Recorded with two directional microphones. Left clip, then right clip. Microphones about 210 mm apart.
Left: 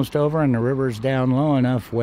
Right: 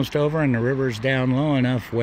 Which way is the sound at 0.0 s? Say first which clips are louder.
Left 1 dB; 15° left (ahead or behind).